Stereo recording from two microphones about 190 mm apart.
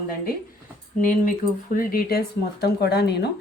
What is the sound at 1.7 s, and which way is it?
Speech, 50° left (ahead or behind).